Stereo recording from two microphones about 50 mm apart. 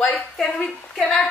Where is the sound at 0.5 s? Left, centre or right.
Centre.